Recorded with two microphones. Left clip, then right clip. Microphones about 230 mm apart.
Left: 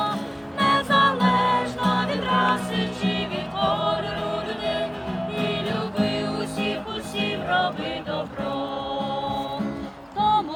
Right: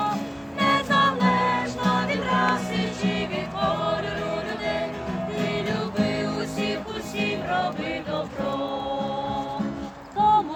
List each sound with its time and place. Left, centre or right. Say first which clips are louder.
0.6 s music: left 2 dB; centre
7.2 s music: left 2 dB; centre
10.2 s a sound: right 2 dB; left